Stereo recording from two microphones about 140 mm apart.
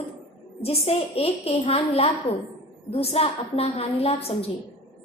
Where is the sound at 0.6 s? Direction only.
45° left (ahead or behind).